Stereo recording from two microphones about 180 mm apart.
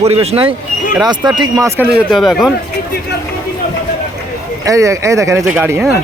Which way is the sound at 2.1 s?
Centre (ahead or behind).